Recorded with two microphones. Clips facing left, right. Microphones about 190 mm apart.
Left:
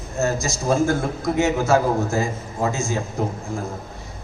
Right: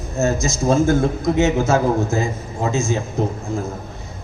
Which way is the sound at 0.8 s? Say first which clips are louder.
Right 5 dB; 20° right (ahead or behind).